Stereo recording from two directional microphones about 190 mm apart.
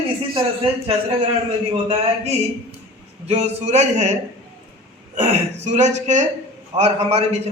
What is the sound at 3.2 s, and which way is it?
A man's voice, 35° right (ahead or behind).